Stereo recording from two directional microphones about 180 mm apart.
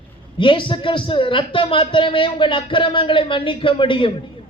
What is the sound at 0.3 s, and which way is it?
A man's voice, 30° left (ahead or behind).